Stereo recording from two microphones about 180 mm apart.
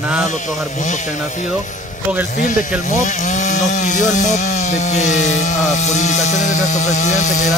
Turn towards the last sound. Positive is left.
turn(degrees=40)  # may be behind; listen again after turning